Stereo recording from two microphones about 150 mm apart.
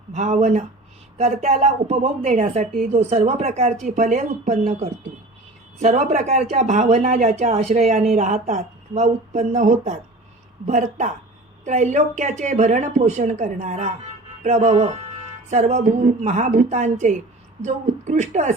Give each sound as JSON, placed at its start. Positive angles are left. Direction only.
{"t": 0.1, "sound": "a woman's voice", "side_deg": -50}